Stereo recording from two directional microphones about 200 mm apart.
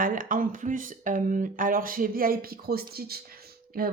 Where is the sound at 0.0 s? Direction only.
45° right (ahead or behind).